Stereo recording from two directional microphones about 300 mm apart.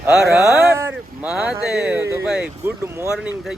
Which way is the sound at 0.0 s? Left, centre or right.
Centre.